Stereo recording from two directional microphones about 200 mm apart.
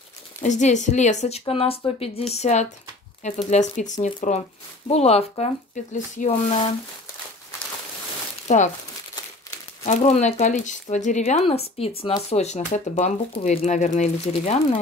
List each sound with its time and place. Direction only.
0.4 s speech: 35° left (ahead or behind)
8.5 s speech: 35° left (ahead or behind)
9.8 s speech: 35° left (ahead or behind)